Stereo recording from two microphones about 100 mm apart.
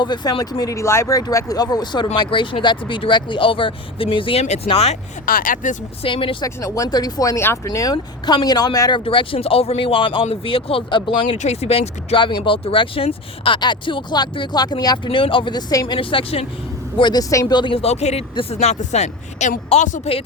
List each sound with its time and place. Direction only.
0.0 s speech: 45° left (ahead or behind); by 4.9 s 90° left
6.0 s speech: 65° left (ahead or behind)
6.4 s speech: 30° left (ahead or behind)
9.0 s speech: 65° left (ahead or behind)
13.6 s speech: 50° left (ahead or behind)
15.7 s speech: 35° left (ahead or behind)
16.0 s speech: 60° left (ahead or behind)
17.0 s speech: 40° left (ahead or behind)
17.4 s speech: 50° left (ahead or behind); by 19.1 s 90° left
19.7 s speech: 75° left (ahead or behind)